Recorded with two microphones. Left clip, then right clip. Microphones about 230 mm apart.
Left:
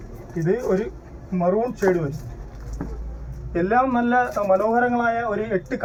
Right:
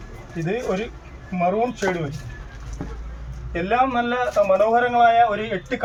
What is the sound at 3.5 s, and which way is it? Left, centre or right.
A man's voice, right.